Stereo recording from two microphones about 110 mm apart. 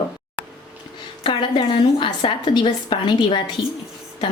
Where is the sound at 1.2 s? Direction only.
45° left (ahead or behind).